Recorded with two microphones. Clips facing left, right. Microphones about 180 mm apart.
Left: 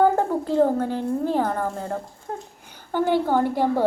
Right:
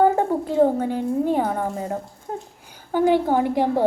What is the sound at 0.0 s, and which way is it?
A woman's voice, centre (ahead or behind).